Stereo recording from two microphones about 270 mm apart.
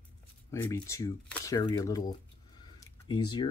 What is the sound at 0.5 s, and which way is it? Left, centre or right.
Speech, centre.